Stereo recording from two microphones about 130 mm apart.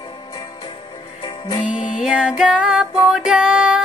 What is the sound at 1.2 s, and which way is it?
Music, 40° left (ahead or behind).